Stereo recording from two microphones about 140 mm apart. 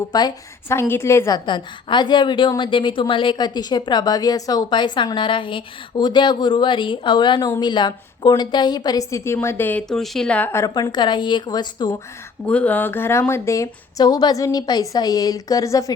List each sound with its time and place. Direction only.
0.1 s a woman's voice: 30° left (ahead or behind)
1.5 s a woman's voice: 35° left (ahead or behind); by 10.7 s 15° left (ahead or behind)
10.8 s a woman's voice: 30° left (ahead or behind)
12.5 s a woman's voice: 10° left (ahead or behind)